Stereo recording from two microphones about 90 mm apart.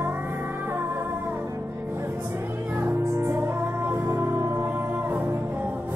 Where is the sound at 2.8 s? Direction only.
30° right (ahead or behind).